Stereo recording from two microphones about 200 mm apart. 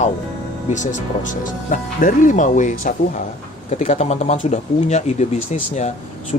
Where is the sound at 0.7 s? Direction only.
35° left (ahead or behind).